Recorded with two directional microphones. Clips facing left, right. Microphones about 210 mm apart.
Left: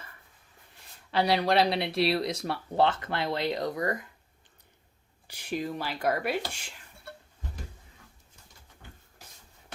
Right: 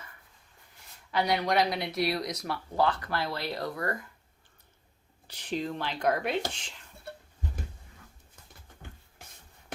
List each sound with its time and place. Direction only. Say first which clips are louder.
1.1 s speech: left 2 dB; 30° left (ahead or behind)
5.3 s speech: even; 10° left (ahead or behind)